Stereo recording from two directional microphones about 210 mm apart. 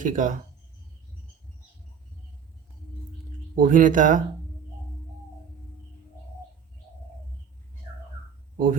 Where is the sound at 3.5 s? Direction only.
40° right (ahead or behind).